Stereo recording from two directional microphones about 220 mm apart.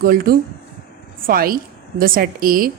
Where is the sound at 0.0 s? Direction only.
40° right (ahead or behind).